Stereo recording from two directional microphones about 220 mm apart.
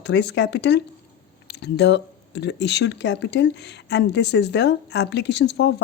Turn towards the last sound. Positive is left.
turn(degrees=50)  # may be behind; listen again after turning